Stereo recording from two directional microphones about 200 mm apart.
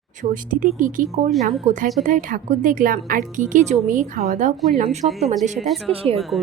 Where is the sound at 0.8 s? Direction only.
40° right (ahead or behind).